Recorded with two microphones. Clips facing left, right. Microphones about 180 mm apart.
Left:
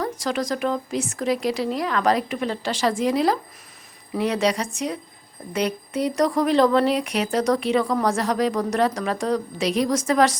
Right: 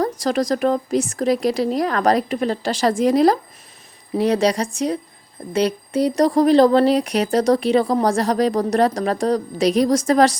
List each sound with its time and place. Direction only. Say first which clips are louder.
0.0 s speech: right 5 dB; 40° right (ahead or behind)